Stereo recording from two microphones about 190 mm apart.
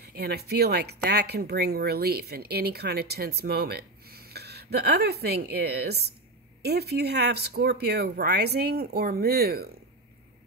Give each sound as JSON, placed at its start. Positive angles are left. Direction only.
{"t": 0.0, "sound": "speech", "side_deg": -55}